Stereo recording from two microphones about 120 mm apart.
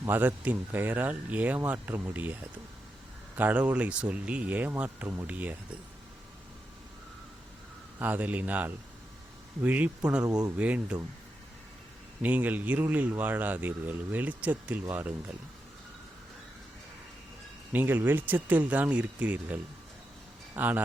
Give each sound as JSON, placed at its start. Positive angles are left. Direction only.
{"t": 0.0, "sound": "speech", "side_deg": -15}
{"t": 7.9, "sound": "speech", "side_deg": -15}
{"t": 12.2, "sound": "speech", "side_deg": -15}
{"t": 17.7, "sound": "speech", "side_deg": -15}